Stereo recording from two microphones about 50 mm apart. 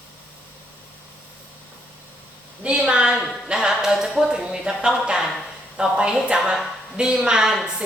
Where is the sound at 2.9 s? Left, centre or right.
Centre.